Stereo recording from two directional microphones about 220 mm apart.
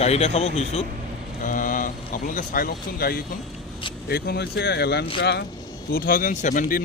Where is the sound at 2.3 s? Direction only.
40° left (ahead or behind).